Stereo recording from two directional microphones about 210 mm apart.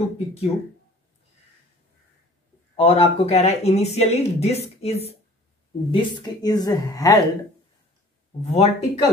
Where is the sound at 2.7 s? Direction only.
30° left (ahead or behind).